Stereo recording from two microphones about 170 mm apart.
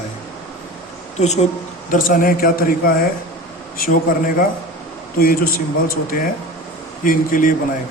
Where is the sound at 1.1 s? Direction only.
40° left (ahead or behind).